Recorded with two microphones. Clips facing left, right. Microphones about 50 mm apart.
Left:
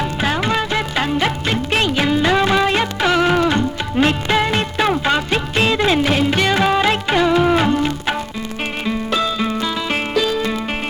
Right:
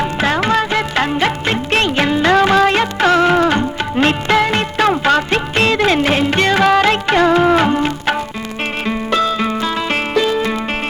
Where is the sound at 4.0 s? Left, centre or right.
Right.